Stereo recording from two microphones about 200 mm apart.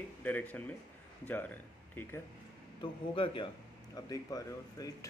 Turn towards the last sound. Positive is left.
turn(degrees=15)  # may be behind; listen again after turning